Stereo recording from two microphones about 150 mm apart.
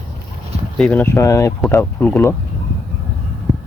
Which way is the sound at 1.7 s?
10° left (ahead or behind).